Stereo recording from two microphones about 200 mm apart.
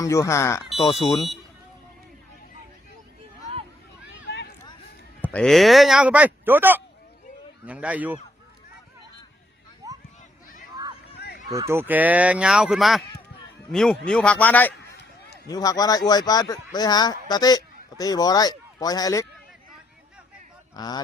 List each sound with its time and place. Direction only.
0.0 s speech: 15° left (ahead or behind)
1.0 s speech: centre (ahead or behind)
4.2 s vehicle: 60° left (ahead or behind)
5.2 s speech: 5° left (ahead or behind)
9.8 s a sound: 15° right (ahead or behind)
11.5 s speech: 15° right (ahead or behind); by 14.7 s 10° left (ahead or behind)
15.4 s a man's voice: 20° left (ahead or behind)
20.7 s a man's voice: 20° left (ahead or behind)